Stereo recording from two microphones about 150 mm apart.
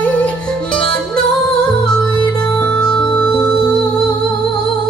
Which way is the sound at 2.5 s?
5° left (ahead or behind).